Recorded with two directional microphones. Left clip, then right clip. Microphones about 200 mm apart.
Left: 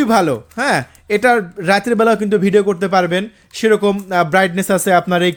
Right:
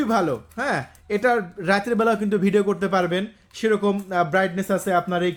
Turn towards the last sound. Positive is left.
turn(degrees=45)  # may be behind; listen again after turning